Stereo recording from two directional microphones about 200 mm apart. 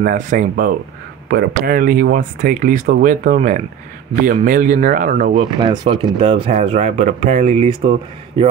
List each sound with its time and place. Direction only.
0.0 s speech: 45° right (ahead or behind)
5.3 s speech: 25° right (ahead or behind)